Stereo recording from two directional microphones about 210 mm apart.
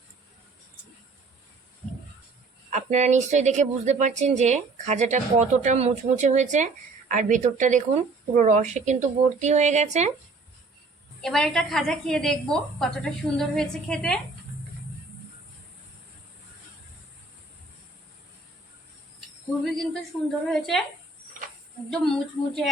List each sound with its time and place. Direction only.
2.6 s speech: 35° right (ahead or behind)
11.2 s a woman's voice: centre (ahead or behind)
19.8 s a woman's voice: centre (ahead or behind)
21.8 s a woman's voice: centre (ahead or behind)